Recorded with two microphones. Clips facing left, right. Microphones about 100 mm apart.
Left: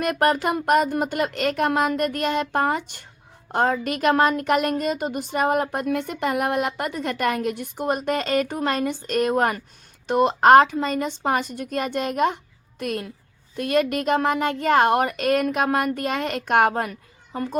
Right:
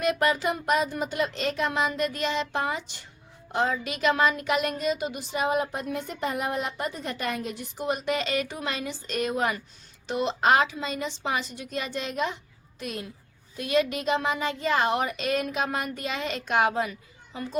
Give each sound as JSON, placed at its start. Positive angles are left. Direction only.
{"t": 0.0, "sound": "a woman's voice", "side_deg": 50}